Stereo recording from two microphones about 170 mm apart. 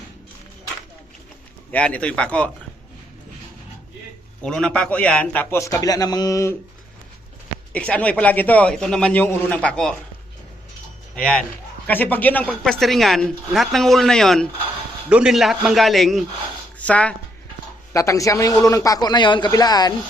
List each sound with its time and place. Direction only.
1.7 s a man's voice: 10° left (ahead or behind)
4.4 s a man's voice: 5° left (ahead or behind)
7.7 s a man's voice: 10° left (ahead or behind)
11.1 s a woman's voice: 5° left (ahead or behind)
17.9 s a man's voice: 20° left (ahead or behind)